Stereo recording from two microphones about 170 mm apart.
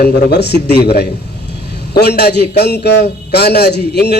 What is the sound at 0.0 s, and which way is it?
A man's voice, 75° left (ahead or behind).